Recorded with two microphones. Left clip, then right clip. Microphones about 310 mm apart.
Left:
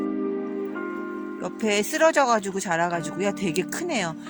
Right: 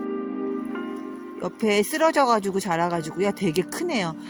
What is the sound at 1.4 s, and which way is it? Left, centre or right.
Speech, right.